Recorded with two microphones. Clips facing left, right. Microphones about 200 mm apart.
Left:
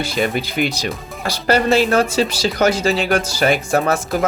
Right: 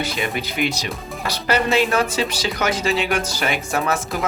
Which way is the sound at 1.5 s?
35° left (ahead or behind).